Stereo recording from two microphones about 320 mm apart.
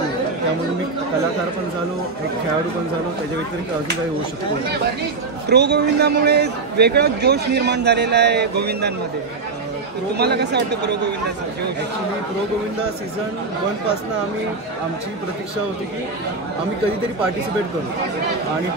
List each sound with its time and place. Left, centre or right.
5.5 s a man's voice: right
10.1 s a man's voice: right